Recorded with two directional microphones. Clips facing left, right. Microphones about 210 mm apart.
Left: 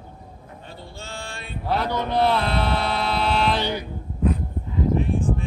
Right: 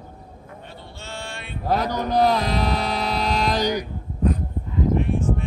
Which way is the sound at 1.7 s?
40° right (ahead or behind).